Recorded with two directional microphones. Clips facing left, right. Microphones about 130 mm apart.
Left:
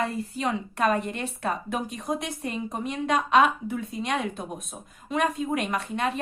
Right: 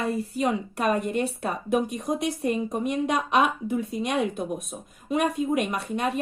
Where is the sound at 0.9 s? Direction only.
15° right (ahead or behind).